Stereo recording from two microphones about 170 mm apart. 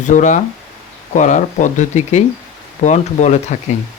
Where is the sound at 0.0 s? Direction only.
45° left (ahead or behind).